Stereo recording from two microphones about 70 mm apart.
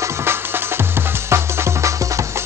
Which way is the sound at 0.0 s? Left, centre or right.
Right.